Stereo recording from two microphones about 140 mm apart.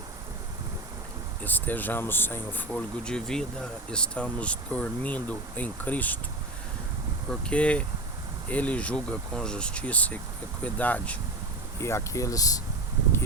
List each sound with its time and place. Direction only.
1.5 s speech: 15° left (ahead or behind)
7.3 s speech: 10° left (ahead or behind); by 12.5 s 25° left (ahead or behind)